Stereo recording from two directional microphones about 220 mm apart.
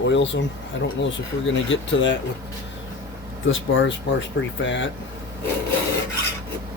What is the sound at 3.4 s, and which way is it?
Speech, 60° left (ahead or behind).